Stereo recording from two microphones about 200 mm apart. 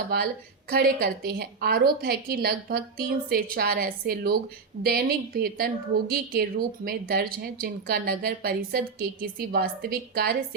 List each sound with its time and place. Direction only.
0.7 s a woman's voice: 55° right (ahead or behind)